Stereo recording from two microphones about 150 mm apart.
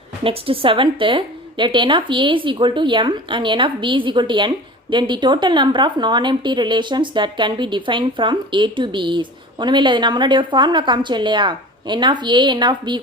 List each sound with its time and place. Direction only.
0.3 s a woman's voice: 40° right (ahead or behind)